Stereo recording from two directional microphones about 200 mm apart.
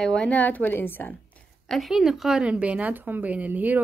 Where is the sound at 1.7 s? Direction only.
Centre (ahead or behind).